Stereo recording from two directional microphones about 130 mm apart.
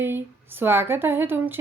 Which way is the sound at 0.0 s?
15° right (ahead or behind).